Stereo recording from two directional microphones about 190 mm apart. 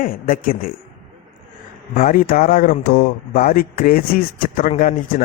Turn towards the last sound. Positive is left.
turn(degrees=45)  # may be behind; listen again after turning